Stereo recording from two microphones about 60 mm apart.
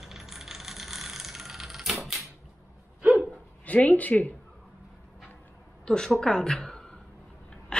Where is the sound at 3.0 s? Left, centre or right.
Right.